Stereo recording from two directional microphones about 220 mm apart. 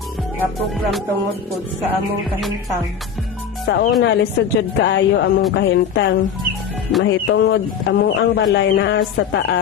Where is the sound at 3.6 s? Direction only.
40° left (ahead or behind).